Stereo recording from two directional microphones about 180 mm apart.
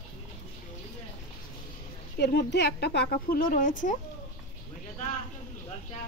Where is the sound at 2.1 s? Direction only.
65° left (ahead or behind).